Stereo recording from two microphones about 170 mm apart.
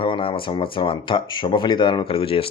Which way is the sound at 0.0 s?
30° left (ahead or behind).